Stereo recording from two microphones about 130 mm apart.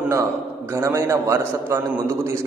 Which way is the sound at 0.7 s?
20° right (ahead or behind).